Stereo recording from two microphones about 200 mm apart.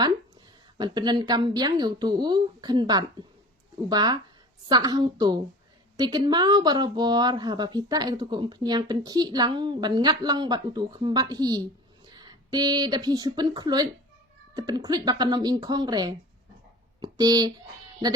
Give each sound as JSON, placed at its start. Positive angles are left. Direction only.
{"t": 0.8, "sound": "speech", "side_deg": -20}